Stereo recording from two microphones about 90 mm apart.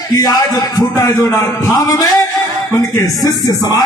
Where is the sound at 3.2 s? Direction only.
45° left (ahead or behind).